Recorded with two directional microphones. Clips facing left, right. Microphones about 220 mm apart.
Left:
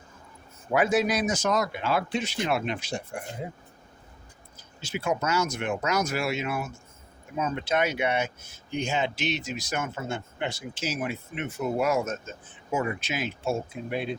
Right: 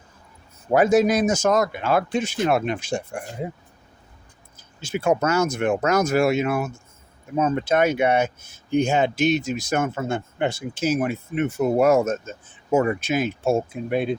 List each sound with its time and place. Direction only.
0.7 s speech: 45° right (ahead or behind)
4.8 s speech: 50° right (ahead or behind)